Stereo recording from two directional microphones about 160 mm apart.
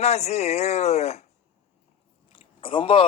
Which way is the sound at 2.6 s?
35° left (ahead or behind).